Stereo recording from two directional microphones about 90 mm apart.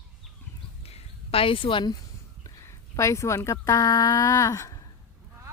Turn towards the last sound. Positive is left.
turn(degrees=35)  # may be behind; listen again after turning